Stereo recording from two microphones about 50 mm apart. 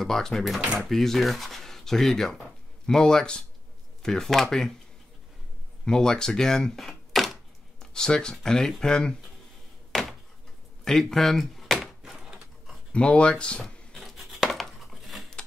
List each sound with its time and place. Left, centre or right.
0.0 s speech: centre
5.9 s speech: centre
9.9 s door: centre
10.8 s a sound: centre
12.9 s speech: left
13.9 s a sound: centre